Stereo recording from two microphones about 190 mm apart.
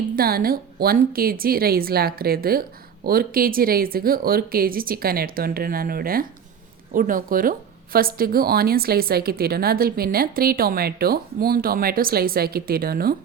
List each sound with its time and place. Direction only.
0.2 s a woman's voice: 50° right (ahead or behind)